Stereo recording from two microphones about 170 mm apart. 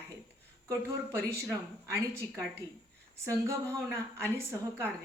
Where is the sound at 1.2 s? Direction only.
15° right (ahead or behind).